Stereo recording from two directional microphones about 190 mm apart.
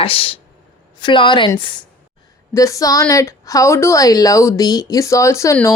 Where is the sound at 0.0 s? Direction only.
30° left (ahead or behind).